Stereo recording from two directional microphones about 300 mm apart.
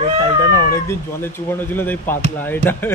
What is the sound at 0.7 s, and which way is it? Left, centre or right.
Speech, centre.